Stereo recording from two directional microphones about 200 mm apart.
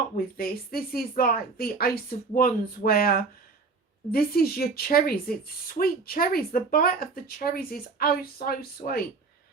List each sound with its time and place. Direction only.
0.3 s speech: 50° left (ahead or behind)